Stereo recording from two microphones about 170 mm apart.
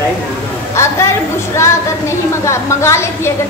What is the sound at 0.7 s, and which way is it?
Speech, 15° left (ahead or behind).